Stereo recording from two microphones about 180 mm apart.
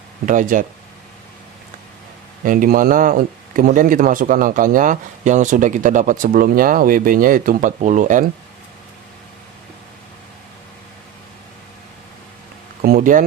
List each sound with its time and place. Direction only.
0.3 s speech: 45° right (ahead or behind)
2.4 s speech: 50° right (ahead or behind)
12.8 s a sound: 55° right (ahead or behind)